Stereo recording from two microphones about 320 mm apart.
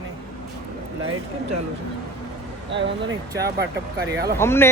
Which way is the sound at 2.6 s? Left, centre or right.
Right.